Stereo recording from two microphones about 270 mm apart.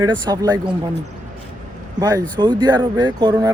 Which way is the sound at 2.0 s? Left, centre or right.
Centre.